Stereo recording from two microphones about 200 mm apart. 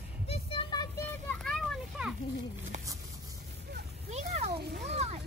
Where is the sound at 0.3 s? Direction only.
25° left (ahead or behind).